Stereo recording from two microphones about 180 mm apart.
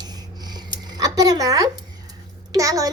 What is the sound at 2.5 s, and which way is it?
Speech, 20° right (ahead or behind).